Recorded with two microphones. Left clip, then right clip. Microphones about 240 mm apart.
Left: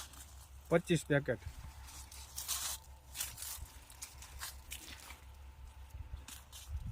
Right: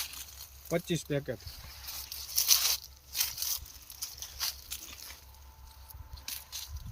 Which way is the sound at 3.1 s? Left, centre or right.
Right.